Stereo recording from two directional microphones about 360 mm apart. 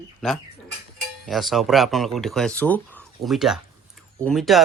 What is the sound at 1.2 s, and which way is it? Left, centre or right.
A man's voice, centre.